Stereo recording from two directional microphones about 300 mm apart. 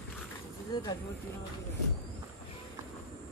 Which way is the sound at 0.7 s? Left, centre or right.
Centre.